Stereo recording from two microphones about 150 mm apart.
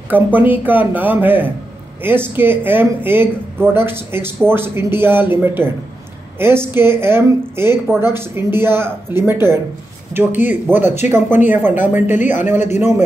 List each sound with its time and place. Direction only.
0.1 s speech: 10° right (ahead or behind)
12.5 s a man's voice: 50° left (ahead or behind)